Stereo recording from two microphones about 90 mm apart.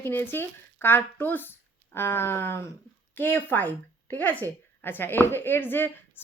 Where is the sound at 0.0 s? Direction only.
25° left (ahead or behind).